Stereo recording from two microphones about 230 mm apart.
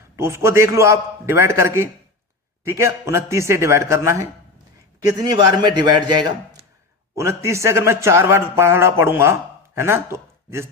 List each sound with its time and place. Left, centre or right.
0.2 s speech: centre